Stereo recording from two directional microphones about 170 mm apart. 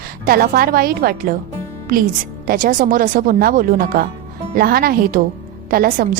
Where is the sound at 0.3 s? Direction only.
60° right (ahead or behind).